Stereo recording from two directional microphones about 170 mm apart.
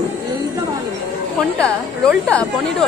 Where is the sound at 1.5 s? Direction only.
5° left (ahead or behind).